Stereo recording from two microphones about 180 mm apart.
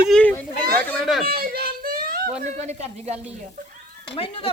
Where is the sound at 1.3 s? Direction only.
55° right (ahead or behind).